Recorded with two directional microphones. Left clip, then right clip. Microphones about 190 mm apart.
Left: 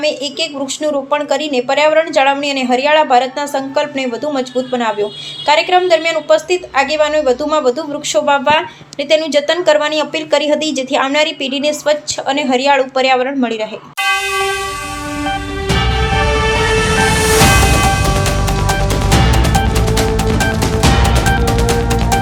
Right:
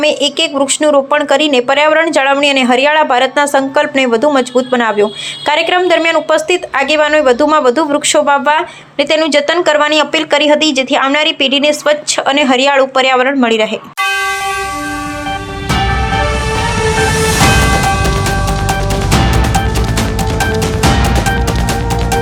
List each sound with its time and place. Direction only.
0.0 s speech: 30° right (ahead or behind); by 13.7 s 15° right (ahead or behind)